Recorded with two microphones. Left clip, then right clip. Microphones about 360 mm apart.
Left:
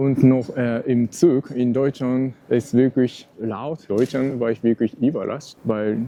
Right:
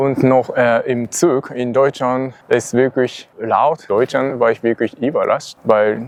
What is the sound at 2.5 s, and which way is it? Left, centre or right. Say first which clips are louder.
Speech: right 5 dB; right.